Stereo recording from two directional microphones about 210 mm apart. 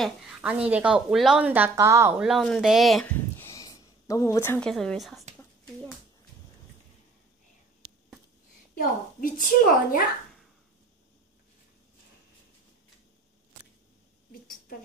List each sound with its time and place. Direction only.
0.0 s a woman's voice: 5° right (ahead or behind)
3.4 s speech: 15° left (ahead or behind); by 5.2 s centre (ahead or behind)
9.2 s a woman's voice: 40° left (ahead or behind)